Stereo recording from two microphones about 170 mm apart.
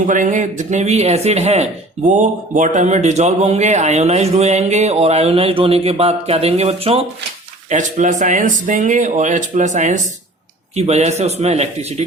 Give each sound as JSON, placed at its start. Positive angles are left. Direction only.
{"t": 0.1, "sound": "a man's voice", "side_deg": -50}
{"t": 7.7, "sound": "a man's voice", "side_deg": -45}